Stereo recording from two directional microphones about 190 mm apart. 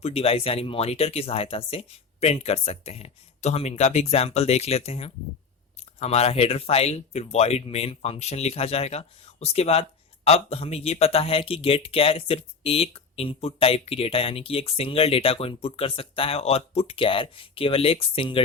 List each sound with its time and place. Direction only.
0.0 s speech: 30° left (ahead or behind)